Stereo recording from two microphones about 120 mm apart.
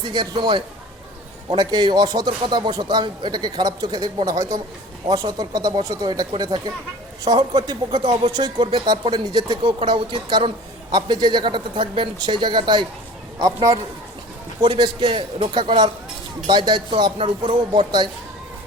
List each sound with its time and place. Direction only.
0.0 s speech: 40° right (ahead or behind)
13.4 s a man's voice: 30° right (ahead or behind)
14.6 s speech: 40° right (ahead or behind)